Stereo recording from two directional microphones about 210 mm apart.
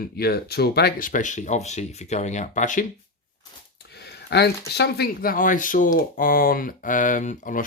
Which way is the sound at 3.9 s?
50° left (ahead or behind).